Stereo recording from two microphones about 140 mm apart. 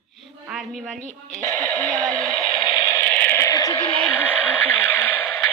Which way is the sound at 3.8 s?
10° left (ahead or behind).